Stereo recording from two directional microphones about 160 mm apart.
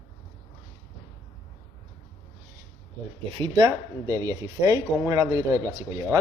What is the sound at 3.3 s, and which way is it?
Speech, 30° right (ahead or behind).